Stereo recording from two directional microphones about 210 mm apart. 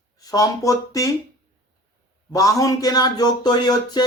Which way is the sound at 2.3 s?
15° left (ahead or behind).